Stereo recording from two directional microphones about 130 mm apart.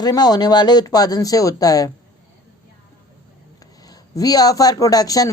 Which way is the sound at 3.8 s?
30° left (ahead or behind).